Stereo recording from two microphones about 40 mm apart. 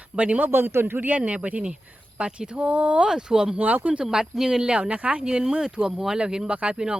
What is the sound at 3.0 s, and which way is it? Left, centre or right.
Speech, centre.